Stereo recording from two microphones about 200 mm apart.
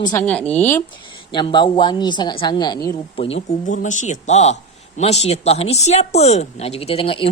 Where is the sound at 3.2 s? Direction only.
35° left (ahead or behind).